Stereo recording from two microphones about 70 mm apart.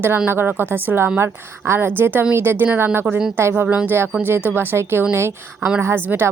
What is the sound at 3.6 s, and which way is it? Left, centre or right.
A woman's voice, right.